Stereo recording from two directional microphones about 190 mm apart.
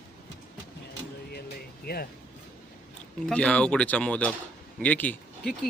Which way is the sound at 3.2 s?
5° left (ahead or behind).